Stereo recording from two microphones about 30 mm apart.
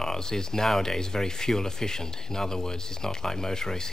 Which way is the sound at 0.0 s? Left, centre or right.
Centre.